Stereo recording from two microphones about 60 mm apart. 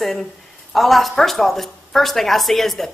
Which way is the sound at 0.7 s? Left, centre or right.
Centre.